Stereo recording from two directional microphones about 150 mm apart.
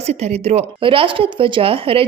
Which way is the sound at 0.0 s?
45° right (ahead or behind).